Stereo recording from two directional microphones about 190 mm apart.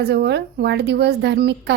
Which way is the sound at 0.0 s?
60° right (ahead or behind).